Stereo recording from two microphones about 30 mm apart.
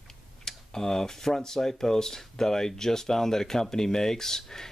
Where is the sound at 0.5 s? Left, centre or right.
Centre.